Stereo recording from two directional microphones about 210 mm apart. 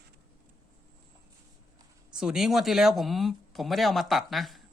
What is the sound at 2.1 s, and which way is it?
Speech, 5° right (ahead or behind).